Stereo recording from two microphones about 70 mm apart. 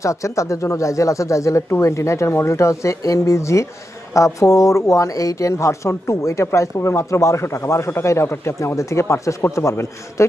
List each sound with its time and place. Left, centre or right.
0.0 s a man's voice: left